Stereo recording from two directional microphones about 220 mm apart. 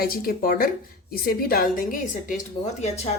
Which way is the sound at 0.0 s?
40° left (ahead or behind).